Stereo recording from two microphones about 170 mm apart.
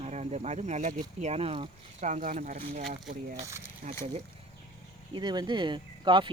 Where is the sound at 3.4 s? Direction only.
15° right (ahead or behind).